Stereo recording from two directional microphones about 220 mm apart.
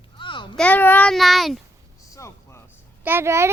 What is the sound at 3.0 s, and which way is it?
Speech, 10° right (ahead or behind).